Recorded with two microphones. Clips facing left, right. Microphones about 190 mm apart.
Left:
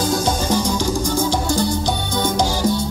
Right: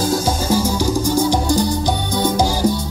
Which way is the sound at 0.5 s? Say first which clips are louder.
Right 2 dB; 5° right (ahead or behind).